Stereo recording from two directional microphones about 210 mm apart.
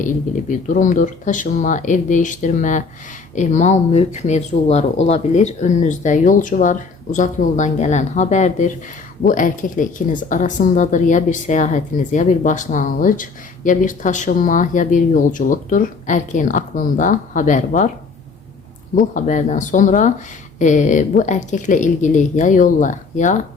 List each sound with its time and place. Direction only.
0.7 s speech: 35° left (ahead or behind)
18.9 s speech: 40° left (ahead or behind)